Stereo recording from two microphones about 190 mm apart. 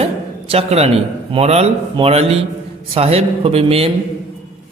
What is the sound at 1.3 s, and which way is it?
A man's voice, 30° right (ahead or behind).